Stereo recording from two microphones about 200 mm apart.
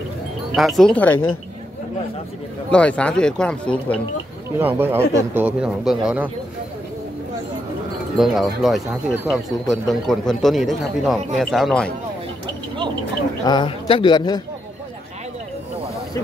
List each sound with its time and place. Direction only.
0.6 s speech: centre (ahead or behind)
2.7 s speech: 5° left (ahead or behind)
4.6 s speech: 10° right (ahead or behind)
8.2 s speech: centre (ahead or behind)
13.5 s speech: 25° left (ahead or behind)